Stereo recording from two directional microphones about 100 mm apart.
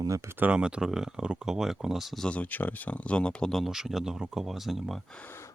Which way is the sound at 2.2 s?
15° left (ahead or behind).